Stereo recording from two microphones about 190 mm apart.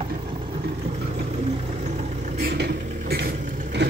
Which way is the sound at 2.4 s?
50° right (ahead or behind).